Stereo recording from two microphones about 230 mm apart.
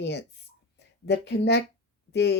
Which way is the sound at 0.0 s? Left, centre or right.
Left.